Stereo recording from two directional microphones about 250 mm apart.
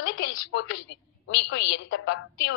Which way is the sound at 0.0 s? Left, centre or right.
Left.